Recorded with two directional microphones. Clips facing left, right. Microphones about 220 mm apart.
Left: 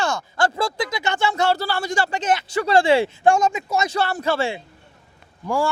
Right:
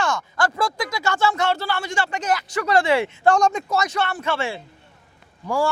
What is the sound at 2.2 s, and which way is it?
Speech, 25° left (ahead or behind).